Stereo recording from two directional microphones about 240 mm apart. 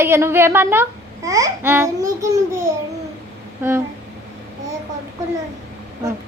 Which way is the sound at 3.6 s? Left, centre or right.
Centre.